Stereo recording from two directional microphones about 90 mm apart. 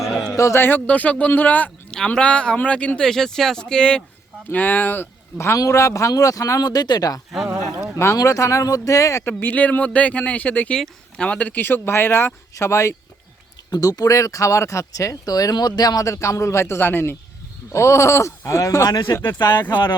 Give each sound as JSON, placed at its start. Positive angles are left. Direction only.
{"t": 0.2, "sound": "a man's voice", "side_deg": 40}
{"t": 7.5, "sound": "speech", "side_deg": -5}
{"t": 7.9, "sound": "speech", "side_deg": 35}
{"t": 9.2, "sound": "speech", "side_deg": 20}
{"t": 13.7, "sound": "speech", "side_deg": 45}